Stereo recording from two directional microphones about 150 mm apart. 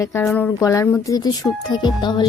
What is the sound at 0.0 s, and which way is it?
Speech, 15° left (ahead or behind).